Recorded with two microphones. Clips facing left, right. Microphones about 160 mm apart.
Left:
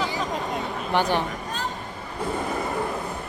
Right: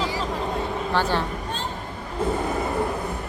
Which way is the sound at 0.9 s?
15° left (ahead or behind).